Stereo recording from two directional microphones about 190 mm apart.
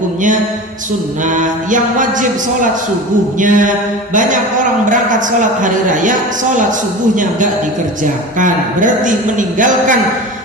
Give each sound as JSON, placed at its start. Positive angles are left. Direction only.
{"t": 1.3, "sound": "speech", "side_deg": -40}
{"t": 3.3, "sound": "speech", "side_deg": -45}
{"t": 5.4, "sound": "speech", "side_deg": -40}
{"t": 8.4, "sound": "speech", "side_deg": -45}